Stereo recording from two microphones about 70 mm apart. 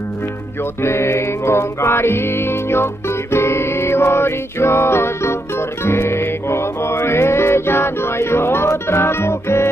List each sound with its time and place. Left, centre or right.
0.8 s music: left